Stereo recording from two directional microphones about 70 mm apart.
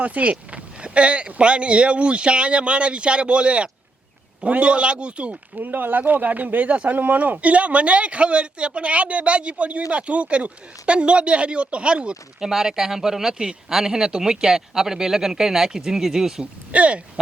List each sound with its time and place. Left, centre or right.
0.0 s speech: right
16.7 s speech: centre